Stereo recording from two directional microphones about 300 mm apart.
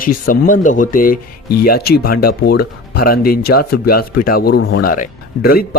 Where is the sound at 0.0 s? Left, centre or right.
Left.